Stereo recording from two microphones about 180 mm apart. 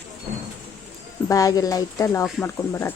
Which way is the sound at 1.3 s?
20° left (ahead or behind).